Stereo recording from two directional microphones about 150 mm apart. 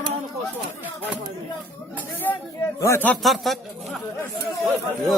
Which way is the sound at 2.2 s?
10° left (ahead or behind).